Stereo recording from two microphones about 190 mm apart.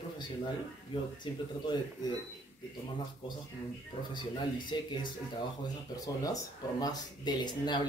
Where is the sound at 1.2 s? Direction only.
20° left (ahead or behind).